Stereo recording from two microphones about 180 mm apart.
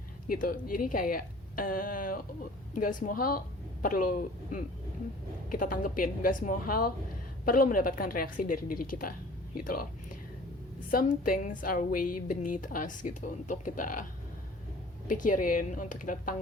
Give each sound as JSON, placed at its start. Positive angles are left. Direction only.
{"t": 0.3, "sound": "a woman's voice", "side_deg": 50}
{"t": 10.9, "sound": "a woman's voice", "side_deg": 50}
{"t": 15.1, "sound": "a woman's voice", "side_deg": 45}